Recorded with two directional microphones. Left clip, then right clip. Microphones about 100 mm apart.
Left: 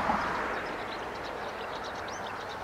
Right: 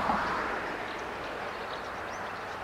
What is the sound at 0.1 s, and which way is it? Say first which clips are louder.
Vehicle: even; 20° right (ahead or behind).